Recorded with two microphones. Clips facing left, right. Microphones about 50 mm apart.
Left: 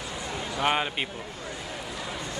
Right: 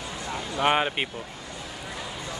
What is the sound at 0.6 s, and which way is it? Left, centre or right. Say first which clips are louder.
Speech: right 3 dB; centre.